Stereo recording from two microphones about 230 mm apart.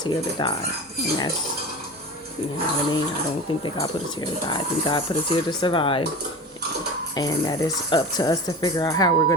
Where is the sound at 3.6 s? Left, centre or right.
Centre.